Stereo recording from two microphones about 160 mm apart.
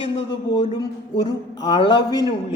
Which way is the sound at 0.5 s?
30° left (ahead or behind).